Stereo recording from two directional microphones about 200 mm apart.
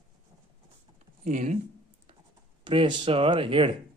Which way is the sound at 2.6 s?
25° right (ahead or behind).